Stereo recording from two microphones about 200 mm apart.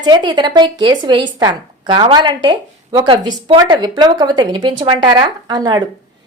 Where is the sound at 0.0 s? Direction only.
20° right (ahead or behind).